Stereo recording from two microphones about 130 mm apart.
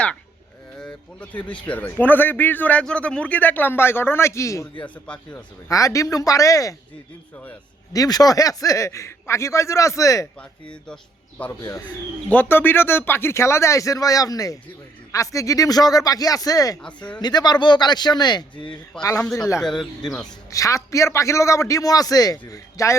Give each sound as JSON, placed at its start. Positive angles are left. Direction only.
{"t": 0.8, "sound": "a man's voice", "side_deg": 10}
{"t": 4.8, "sound": "a man's voice", "side_deg": 10}
{"t": 5.6, "sound": "a man's voice", "side_deg": 25}
{"t": 7.9, "sound": "a man's voice", "side_deg": 30}
{"t": 11.6, "sound": "a man's voice", "side_deg": 25}
{"t": 16.8, "sound": "a man's voice", "side_deg": 10}
{"t": 17.2, "sound": "speech", "side_deg": 30}
{"t": 19.2, "sound": "a man's voice", "side_deg": 5}
{"t": 20.5, "sound": "a man's voice", "side_deg": 25}